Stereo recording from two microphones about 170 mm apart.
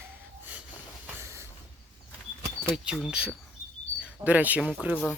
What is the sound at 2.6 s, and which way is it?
Speech, 5° right (ahead or behind).